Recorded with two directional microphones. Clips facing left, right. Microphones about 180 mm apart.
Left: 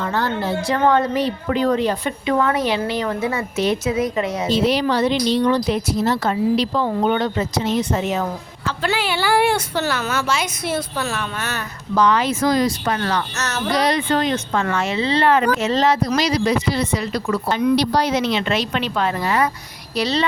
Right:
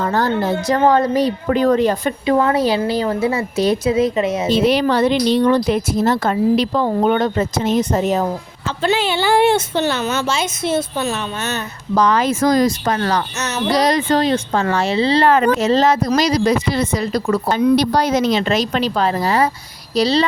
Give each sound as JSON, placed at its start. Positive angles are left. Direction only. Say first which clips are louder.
{"t": 0.0, "sound": "speech", "louder": "right 4 dB", "side_deg": -40}
{"t": 2.4, "sound": "speech", "louder": "right 2 dB", "side_deg": -30}
{"t": 4.5, "sound": "speech", "louder": "right 2 dB", "side_deg": -55}
{"t": 8.6, "sound": "a woman's voice", "louder": "right 4 dB", "side_deg": -25}
{"t": 11.9, "sound": "speech", "louder": "right 2 dB", "side_deg": -40}
{"t": 13.4, "sound": "speech", "louder": "right 3 dB", "side_deg": -15}
{"t": 13.7, "sound": "speech", "louder": "right 3 dB", "side_deg": -40}